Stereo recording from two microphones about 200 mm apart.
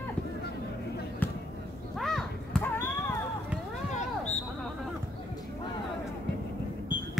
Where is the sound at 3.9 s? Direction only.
35° left (ahead or behind).